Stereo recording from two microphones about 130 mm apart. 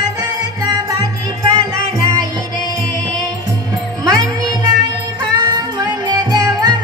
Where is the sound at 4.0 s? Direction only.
30° right (ahead or behind).